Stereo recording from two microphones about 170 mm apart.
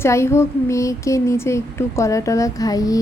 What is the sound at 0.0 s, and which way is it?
A woman's voice, 15° left (ahead or behind).